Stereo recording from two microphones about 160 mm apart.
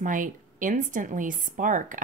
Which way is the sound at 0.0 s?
55° right (ahead or behind).